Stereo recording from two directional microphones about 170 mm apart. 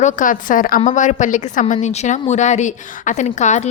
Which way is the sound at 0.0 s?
50° left (ahead or behind).